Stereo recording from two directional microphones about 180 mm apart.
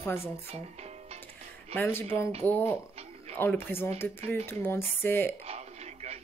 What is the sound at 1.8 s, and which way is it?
A woman's voice, 10° left (ahead or behind).